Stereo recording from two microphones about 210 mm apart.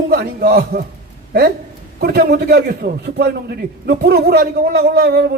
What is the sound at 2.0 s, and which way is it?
A man's voice, 50° right (ahead or behind).